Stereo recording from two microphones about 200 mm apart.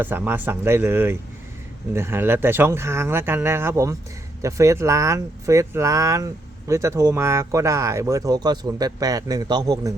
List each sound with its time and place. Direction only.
0.0 s speech: 10° right (ahead or behind)